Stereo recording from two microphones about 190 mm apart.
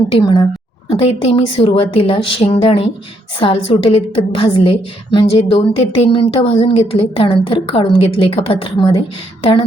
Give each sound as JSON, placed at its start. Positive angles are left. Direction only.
{"t": 0.2, "sound": "a woman's voice", "side_deg": 20}